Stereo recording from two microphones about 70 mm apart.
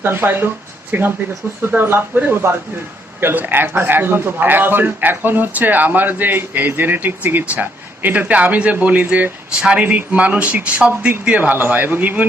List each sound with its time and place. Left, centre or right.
0.0 s a man's voice: right